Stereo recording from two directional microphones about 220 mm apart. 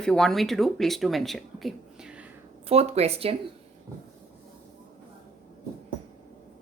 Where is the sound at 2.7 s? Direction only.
30° right (ahead or behind).